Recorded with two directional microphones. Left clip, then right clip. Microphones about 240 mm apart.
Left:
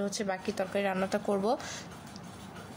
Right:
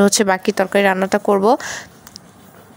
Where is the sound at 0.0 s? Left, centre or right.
Right.